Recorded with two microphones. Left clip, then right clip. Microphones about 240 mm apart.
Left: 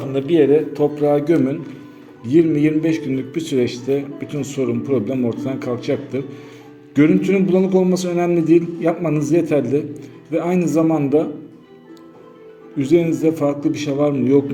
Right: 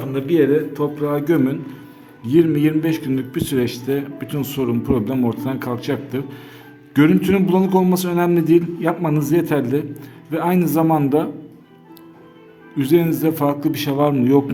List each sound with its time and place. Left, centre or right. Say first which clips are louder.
0.0 s a man's voice: left 2 dB; centre
12.7 s a man's voice: even; right